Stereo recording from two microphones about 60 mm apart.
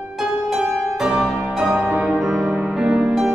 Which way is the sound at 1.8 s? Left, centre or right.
Right.